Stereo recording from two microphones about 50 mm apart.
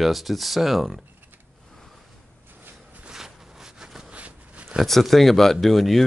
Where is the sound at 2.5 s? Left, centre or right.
Right.